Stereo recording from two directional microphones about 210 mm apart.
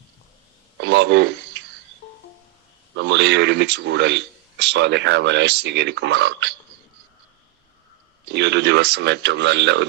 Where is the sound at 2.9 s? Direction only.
60° right (ahead or behind).